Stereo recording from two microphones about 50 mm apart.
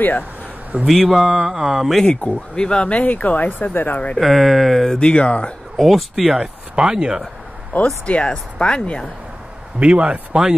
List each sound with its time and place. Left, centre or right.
0.8 s speech: centre
2.0 s speech: centre
3.0 s speech: left
4.2 s speech: centre
4.9 s speech: left
5.8 s speech: centre
6.7 s speech: centre
7.7 s speech: left
9.8 s a man's voice: right